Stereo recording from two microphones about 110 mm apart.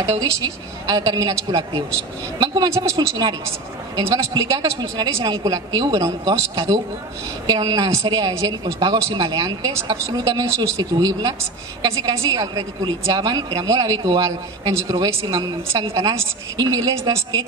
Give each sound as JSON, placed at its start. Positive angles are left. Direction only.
{"t": 0.2, "sound": "a woman's voice", "side_deg": -35}
{"t": 2.7, "sound": "speech", "side_deg": -25}
{"t": 3.9, "sound": "a woman's voice", "side_deg": -40}
{"t": 14.7, "sound": "a woman's voice", "side_deg": -30}
{"t": 15.9, "sound": "a woman's voice", "side_deg": -30}